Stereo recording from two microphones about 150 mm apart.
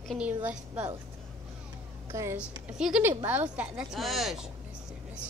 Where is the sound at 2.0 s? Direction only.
20° right (ahead or behind).